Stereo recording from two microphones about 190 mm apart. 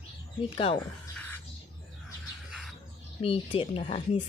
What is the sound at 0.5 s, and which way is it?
Speech, 30° left (ahead or behind).